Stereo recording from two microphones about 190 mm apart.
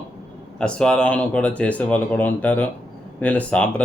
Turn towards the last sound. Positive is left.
turn(degrees=5)  # may be behind; listen again after turning